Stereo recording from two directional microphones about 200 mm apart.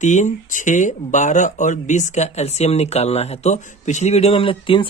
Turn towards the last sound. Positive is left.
turn(degrees=25)  # may be behind; listen again after turning